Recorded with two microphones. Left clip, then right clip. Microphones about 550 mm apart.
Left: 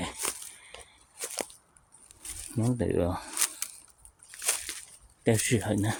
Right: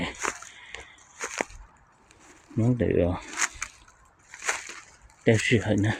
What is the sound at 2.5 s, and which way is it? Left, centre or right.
Speech, left.